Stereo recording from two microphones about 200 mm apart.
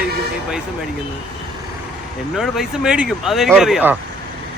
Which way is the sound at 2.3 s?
Centre (ahead or behind).